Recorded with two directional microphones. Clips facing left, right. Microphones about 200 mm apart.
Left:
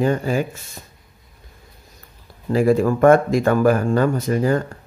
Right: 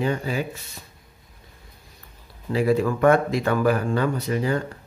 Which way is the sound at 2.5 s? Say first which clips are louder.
Left 4 dB; 45° left (ahead or behind).